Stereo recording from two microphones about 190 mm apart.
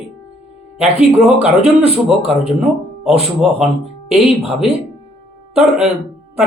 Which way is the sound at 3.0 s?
5° right (ahead or behind).